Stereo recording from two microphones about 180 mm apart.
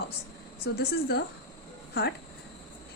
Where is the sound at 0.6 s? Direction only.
60° left (ahead or behind).